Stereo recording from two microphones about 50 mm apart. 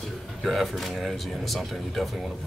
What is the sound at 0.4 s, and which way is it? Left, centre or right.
Speech, centre.